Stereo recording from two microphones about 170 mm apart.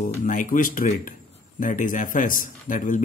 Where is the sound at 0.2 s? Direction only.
50° left (ahead or behind).